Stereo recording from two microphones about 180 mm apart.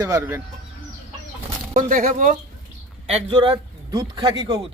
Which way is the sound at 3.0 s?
25° right (ahead or behind).